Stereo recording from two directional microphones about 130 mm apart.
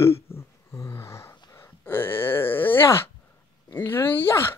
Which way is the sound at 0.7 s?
20° left (ahead or behind).